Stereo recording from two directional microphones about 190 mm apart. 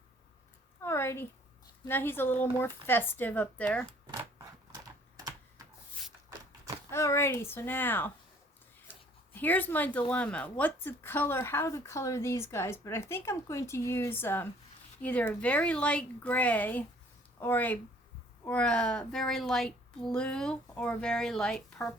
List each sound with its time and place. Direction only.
0.8 s a sound: 15° left (ahead or behind)
1.8 s speech: 10° left (ahead or behind)
4.7 s typing: 20° right (ahead or behind)
6.9 s speech: 15° left (ahead or behind)
9.3 s a woman's voice: 10° left (ahead or behind)